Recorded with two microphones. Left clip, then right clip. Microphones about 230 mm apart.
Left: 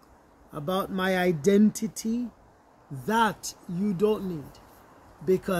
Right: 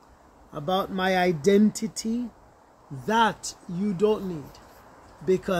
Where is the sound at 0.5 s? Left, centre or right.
Centre.